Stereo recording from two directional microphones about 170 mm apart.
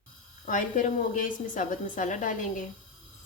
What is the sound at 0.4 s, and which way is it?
Speech, 50° left (ahead or behind).